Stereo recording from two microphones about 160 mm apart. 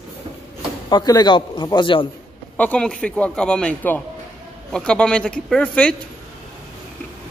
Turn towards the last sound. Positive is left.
turn(degrees=5)  # may be behind; listen again after turning